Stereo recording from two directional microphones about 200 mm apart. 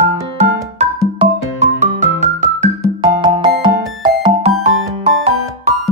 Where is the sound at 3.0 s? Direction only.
20° right (ahead or behind).